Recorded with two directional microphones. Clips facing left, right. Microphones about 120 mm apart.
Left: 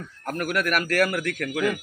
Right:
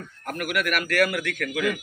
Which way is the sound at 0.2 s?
35° left (ahead or behind).